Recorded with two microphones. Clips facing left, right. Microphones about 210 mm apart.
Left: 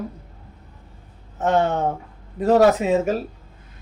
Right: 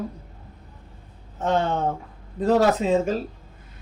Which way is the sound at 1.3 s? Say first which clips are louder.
Left 3 dB; 15° left (ahead or behind).